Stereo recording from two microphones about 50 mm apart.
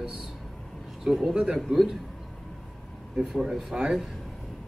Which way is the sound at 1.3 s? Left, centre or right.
Centre.